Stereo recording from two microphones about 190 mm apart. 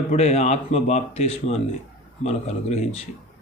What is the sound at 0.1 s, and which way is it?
Speech, 35° left (ahead or behind).